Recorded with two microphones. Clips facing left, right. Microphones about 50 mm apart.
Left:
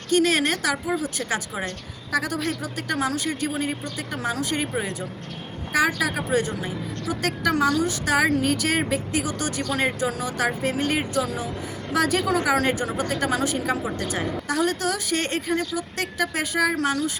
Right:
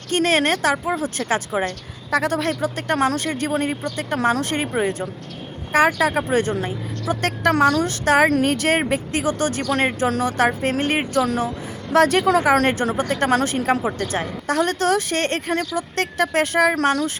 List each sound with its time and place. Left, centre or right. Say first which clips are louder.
0.1 s a woman's voice: right 2 dB; right
5.7 s a woman's voice: right 5 dB; right
10.1 s a woman's voice: right 6 dB; right
11.9 s a woman's voice: right 6 dB; right